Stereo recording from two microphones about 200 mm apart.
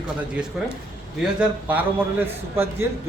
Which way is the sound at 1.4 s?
10° right (ahead or behind).